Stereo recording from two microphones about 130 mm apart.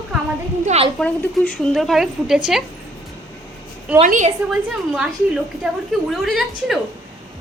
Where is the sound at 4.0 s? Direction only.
70° right (ahead or behind).